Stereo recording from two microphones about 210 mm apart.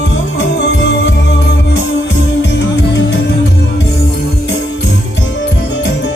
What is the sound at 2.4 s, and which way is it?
Music, 60° left (ahead or behind).